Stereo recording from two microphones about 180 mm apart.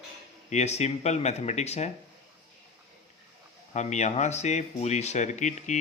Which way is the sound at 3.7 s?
40° left (ahead or behind).